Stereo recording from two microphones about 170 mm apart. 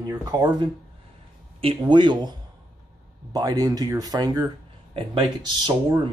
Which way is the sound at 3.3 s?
25° right (ahead or behind).